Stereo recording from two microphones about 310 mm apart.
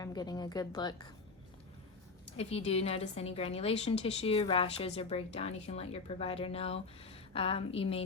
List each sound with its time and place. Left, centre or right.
0.0 s a woman's voice: centre
2.3 s a woman's voice: centre